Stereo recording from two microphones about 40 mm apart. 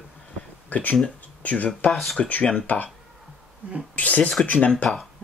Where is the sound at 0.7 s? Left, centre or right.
Left.